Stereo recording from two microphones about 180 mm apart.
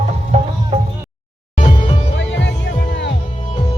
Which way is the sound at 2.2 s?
75° left (ahead or behind).